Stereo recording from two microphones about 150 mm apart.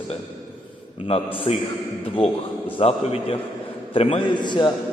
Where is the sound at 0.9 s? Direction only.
40° left (ahead or behind).